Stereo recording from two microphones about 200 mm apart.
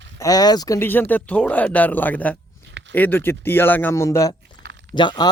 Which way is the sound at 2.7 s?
65° right (ahead or behind).